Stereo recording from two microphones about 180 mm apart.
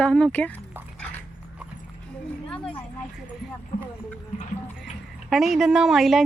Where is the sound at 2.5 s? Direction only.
5° left (ahead or behind).